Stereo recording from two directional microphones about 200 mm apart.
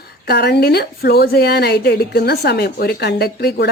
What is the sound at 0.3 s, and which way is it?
A woman's voice, 55° left (ahead or behind).